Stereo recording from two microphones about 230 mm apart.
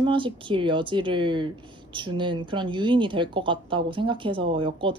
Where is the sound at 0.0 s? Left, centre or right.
Right.